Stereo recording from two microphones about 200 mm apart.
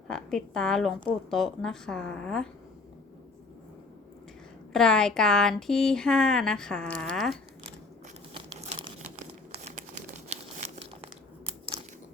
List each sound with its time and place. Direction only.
0.1 s speech: 5° left (ahead or behind)
4.7 s speech: 5° left (ahead or behind)